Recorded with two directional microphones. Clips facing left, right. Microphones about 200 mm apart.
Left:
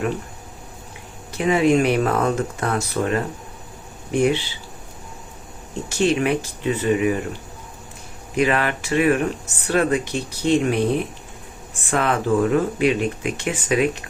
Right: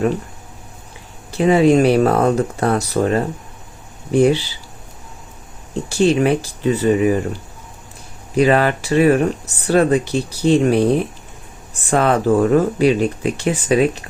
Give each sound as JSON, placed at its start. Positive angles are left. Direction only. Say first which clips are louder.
{"t": 1.3, "sound": "speech", "louder": "right 5 dB", "side_deg": -30}
{"t": 5.9, "sound": "speech", "louder": "right 4 dB", "side_deg": -35}
{"t": 8.4, "sound": "speech", "louder": "right 6 dB", "side_deg": -35}
{"t": 11.9, "sound": "speech", "louder": "right 5 dB", "side_deg": -40}